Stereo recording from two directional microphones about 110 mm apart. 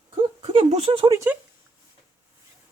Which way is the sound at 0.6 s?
70° right (ahead or behind).